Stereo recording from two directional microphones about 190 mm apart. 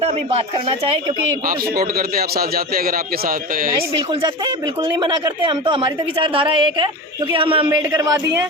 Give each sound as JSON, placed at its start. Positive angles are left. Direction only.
{"t": 0.0, "sound": "speech", "side_deg": -35}
{"t": 1.5, "sound": "a man's voice", "side_deg": -50}
{"t": 3.9, "sound": "speech", "side_deg": -25}
{"t": 7.8, "sound": "speech", "side_deg": -15}